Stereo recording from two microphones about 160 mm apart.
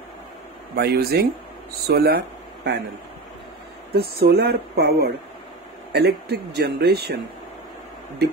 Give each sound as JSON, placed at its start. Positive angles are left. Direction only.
{"t": 0.7, "sound": "speech", "side_deg": -80}
{"t": 3.9, "sound": "speech", "side_deg": -80}
{"t": 5.9, "sound": "speech", "side_deg": -90}